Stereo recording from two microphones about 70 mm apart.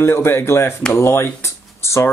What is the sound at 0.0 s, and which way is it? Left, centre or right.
Speech, left.